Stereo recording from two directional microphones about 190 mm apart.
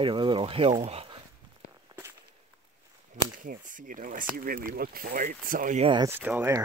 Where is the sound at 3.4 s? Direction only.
45° right (ahead or behind).